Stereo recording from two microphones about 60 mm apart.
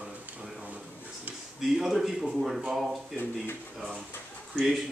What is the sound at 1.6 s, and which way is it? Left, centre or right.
A man's voice, centre.